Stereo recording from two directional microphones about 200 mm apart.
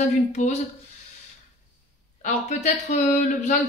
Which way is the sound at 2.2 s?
35° left (ahead or behind).